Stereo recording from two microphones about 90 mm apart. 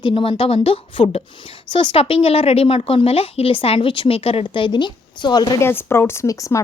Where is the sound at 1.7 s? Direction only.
70° left (ahead or behind); by 5.6 s 55° left (ahead or behind).